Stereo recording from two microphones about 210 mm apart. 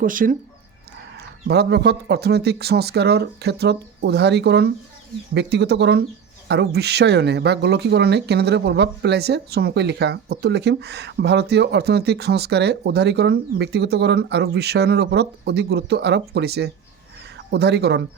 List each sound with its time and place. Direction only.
0.0 s speech: 40° right (ahead or behind)
1.5 s speech: 55° right (ahead or behind)